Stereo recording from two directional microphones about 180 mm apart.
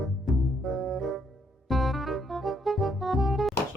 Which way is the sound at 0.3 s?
Centre (ahead or behind).